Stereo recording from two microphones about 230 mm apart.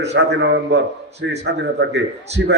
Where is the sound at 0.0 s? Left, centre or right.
Right.